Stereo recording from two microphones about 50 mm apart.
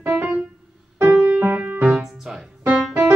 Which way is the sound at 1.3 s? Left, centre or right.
Right.